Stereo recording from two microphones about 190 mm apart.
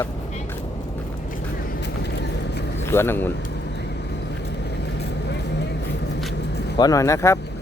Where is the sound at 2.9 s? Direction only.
10° left (ahead or behind).